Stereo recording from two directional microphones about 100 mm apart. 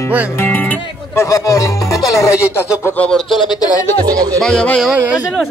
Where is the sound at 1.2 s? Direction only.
35° left (ahead or behind).